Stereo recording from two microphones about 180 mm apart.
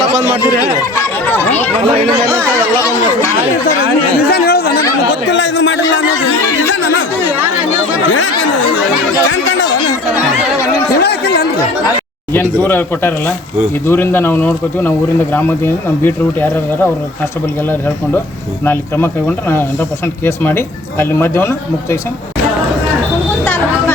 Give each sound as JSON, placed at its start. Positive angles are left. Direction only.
{"t": 0.4, "sound": "speech", "side_deg": 20}
{"t": 1.3, "sound": "speech", "side_deg": 10}
{"t": 2.8, "sound": "speech", "side_deg": 15}
{"t": 4.3, "sound": "chatter", "side_deg": 60}
{"t": 5.3, "sound": "a man's voice", "side_deg": 85}
{"t": 9.3, "sound": "a man's voice", "side_deg": 90}
{"t": 11.0, "sound": "speech", "side_deg": 65}
{"t": 12.3, "sound": "speech", "side_deg": 10}
{"t": 18.6, "sound": "speech", "side_deg": 10}
{"t": 23.5, "sound": "vehicle", "side_deg": 10}